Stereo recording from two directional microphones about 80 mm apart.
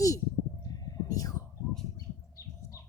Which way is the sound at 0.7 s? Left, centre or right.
Left.